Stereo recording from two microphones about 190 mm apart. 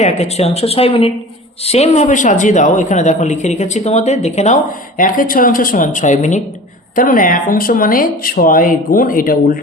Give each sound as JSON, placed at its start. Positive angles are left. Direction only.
{"t": 0.0, "sound": "a man's voice", "side_deg": 35}